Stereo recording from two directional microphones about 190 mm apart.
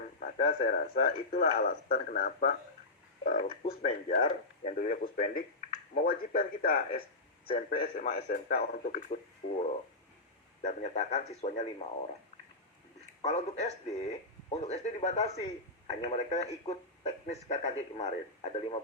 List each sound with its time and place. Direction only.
0.2 s a man's voice: 45° left (ahead or behind)
7.7 s speech: 35° left (ahead or behind)
10.6 s speech: 35° left (ahead or behind)
13.2 s speech: 35° left (ahead or behind)